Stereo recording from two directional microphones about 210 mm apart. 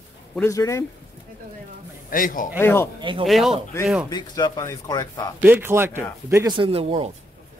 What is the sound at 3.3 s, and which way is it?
Speech, centre (ahead or behind).